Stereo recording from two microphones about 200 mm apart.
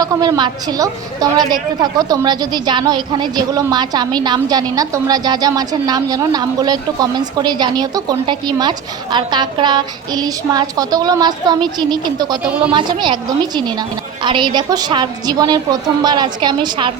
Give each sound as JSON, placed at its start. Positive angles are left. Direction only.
{"t": 0.0, "sound": "a woman's voice", "side_deg": -20}
{"t": 12.5, "sound": "a woman's voice", "side_deg": -5}
{"t": 12.7, "sound": "a woman's voice", "side_deg": -20}